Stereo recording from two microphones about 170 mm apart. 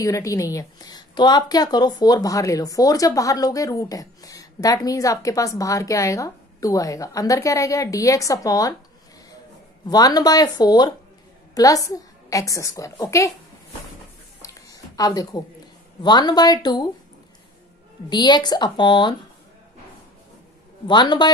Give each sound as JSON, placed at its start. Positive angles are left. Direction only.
{"t": 0.0, "sound": "a woman's voice", "side_deg": 20}
{"t": 9.8, "sound": "a woman's voice", "side_deg": 20}
{"t": 14.4, "sound": "a sound", "side_deg": 20}
{"t": 16.0, "sound": "a woman's voice", "side_deg": 25}
{"t": 18.1, "sound": "a woman's voice", "side_deg": 25}
{"t": 20.8, "sound": "a woman's voice", "side_deg": 25}